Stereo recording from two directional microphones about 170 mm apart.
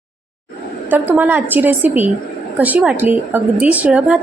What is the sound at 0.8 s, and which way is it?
A woman's voice, 10° right (ahead or behind).